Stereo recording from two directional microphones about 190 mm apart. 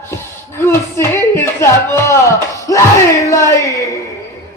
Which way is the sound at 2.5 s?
15° left (ahead or behind).